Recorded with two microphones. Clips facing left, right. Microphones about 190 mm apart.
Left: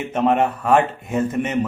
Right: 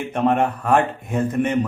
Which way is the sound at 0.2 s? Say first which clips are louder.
Left 1 dB; 5° left (ahead or behind).